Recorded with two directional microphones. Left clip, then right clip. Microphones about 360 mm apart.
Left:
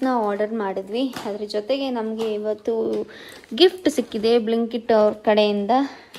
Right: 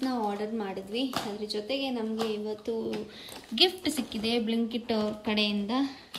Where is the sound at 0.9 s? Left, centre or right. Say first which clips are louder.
Left 6 dB; centre.